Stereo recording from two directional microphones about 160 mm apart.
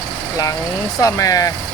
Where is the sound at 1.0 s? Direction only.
20° left (ahead or behind).